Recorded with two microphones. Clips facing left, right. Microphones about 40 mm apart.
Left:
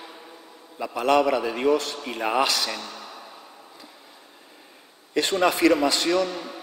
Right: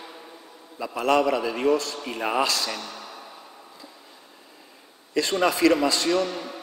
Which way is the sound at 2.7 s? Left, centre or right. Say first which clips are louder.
Even; centre.